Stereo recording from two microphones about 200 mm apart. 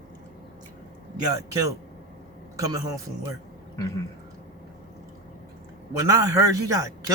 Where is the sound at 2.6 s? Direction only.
20° right (ahead or behind).